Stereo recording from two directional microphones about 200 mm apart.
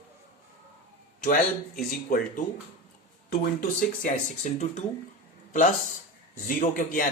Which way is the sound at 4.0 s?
35° left (ahead or behind).